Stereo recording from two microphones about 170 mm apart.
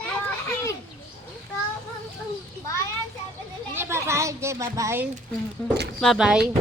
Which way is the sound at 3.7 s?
15° right (ahead or behind).